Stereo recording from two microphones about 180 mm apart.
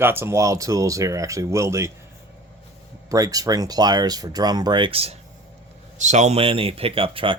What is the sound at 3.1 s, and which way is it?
Speech, 20° right (ahead or behind).